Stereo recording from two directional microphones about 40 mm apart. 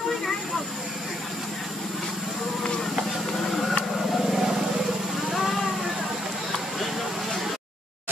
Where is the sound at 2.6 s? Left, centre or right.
Centre.